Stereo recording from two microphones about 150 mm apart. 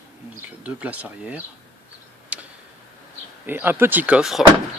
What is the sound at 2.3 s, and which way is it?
Tick-tock, 5° right (ahead or behind).